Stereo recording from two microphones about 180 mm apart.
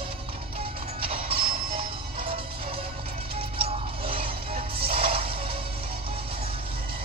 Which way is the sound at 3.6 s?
30° right (ahead or behind).